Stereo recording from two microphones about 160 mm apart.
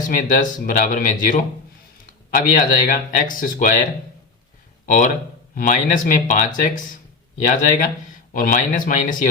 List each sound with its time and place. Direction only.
0.0 s speech: 55° left (ahead or behind)
4.9 s speech: 55° left (ahead or behind)